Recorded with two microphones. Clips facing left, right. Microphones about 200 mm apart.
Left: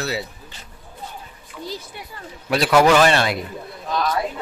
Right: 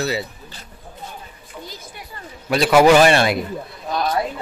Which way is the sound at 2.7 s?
15° right (ahead or behind).